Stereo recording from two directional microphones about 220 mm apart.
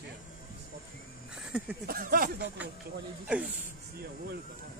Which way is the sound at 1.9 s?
40° right (ahead or behind).